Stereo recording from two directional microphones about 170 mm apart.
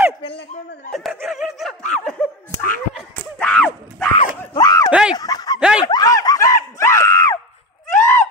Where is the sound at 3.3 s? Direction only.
10° left (ahead or behind).